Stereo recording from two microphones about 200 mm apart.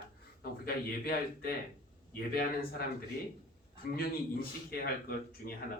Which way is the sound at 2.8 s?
50° left (ahead or behind).